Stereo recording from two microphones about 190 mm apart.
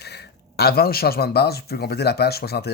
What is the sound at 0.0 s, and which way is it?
Speech, 60° left (ahead or behind).